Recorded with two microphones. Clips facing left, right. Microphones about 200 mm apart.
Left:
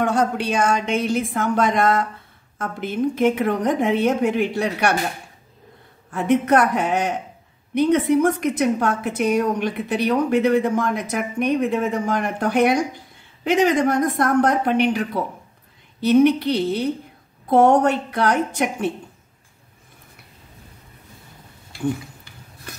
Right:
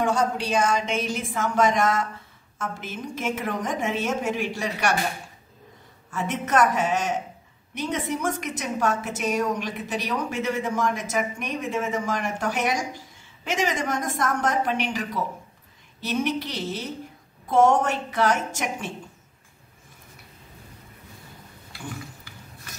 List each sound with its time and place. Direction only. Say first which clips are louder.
0.0 s a woman's voice: left 3 dB; 60° left (ahead or behind)
6.0 s a woman's voice: left 11 dB; 60° left (ahead or behind)